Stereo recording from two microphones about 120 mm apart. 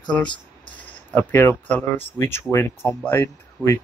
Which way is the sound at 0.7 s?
15° left (ahead or behind).